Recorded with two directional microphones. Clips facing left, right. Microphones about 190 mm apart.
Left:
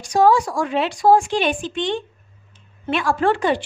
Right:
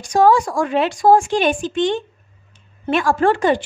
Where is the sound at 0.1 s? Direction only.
50° right (ahead or behind).